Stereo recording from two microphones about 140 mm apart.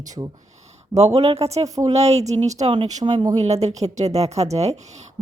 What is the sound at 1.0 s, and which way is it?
Speech, 50° right (ahead or behind).